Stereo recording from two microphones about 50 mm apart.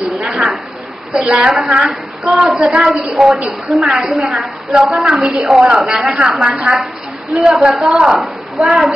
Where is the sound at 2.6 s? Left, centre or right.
Centre.